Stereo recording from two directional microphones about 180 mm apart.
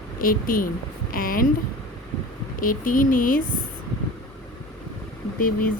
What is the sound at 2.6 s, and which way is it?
Speech, 50° left (ahead or behind).